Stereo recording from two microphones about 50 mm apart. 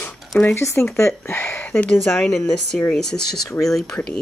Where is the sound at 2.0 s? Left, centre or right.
Centre.